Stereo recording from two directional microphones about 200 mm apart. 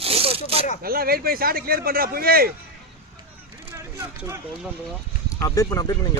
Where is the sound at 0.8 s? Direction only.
50° right (ahead or behind).